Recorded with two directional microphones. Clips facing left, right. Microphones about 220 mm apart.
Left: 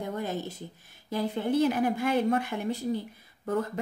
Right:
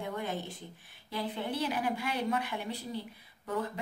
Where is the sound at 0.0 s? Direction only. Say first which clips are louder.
Left 4 dB; 40° left (ahead or behind).